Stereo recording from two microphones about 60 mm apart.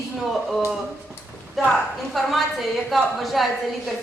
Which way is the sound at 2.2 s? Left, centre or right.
Centre.